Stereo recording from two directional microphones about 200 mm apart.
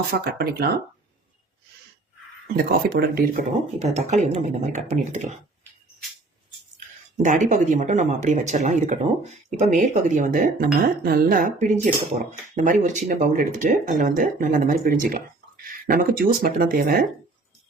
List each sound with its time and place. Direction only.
0.1 s speech: 50° right (ahead or behind)
2.6 s speech: 50° right (ahead or behind)
3.9 s speech: 35° right (ahead or behind)
6.7 s speech: 35° right (ahead or behind)